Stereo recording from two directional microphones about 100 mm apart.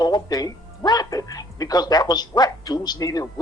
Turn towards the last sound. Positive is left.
turn(degrees=40)  # may be behind; listen again after turning